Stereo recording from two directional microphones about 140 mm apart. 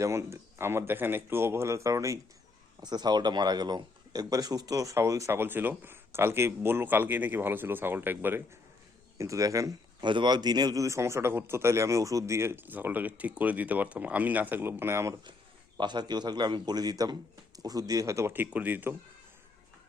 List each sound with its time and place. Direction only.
0.0 s speech: 20° right (ahead or behind)
15.8 s a man's voice: 30° right (ahead or behind); by 18.9 s 10° right (ahead or behind)